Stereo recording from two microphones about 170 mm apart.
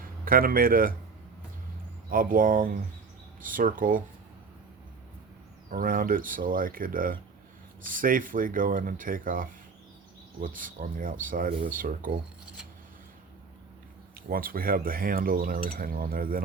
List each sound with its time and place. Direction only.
0.0 s speech: 55° right (ahead or behind)
2.0 s speech: 55° right (ahead or behind)
5.7 s speech: 55° right (ahead or behind)
14.3 s speech: 60° right (ahead or behind)